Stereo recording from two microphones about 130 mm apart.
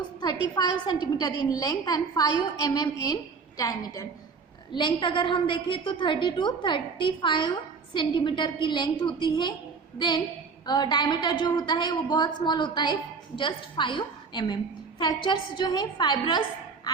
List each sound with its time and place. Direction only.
0.2 s a woman's voice: 30° left (ahead or behind)
10.7 s a woman's voice: 35° left (ahead or behind)